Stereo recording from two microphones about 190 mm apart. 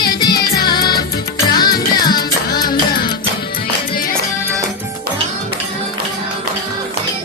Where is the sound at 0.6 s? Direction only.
20° left (ahead or behind).